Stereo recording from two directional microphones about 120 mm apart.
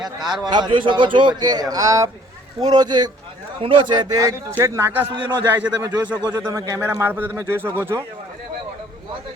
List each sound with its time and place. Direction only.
0.0 s a man's voice: 5° right (ahead or behind)
0.7 s a man's voice: 45° right (ahead or behind); by 5.9 s 20° right (ahead or behind)
6.1 s a man's voice: 35° right (ahead or behind)
6.7 s speech: 20° right (ahead or behind)